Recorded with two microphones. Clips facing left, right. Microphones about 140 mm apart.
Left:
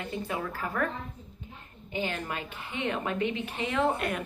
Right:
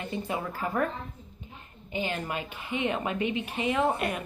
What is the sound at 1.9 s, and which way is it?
A woman's voice, 15° right (ahead or behind).